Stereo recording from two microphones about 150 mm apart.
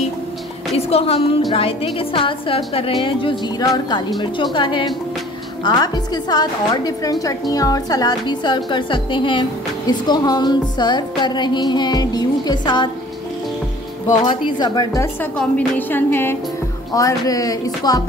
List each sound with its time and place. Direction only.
0.7 s a woman's voice: 40° left (ahead or behind)
15.3 s a woman's voice: 10° left (ahead or behind); by 18.0 s 25° left (ahead or behind)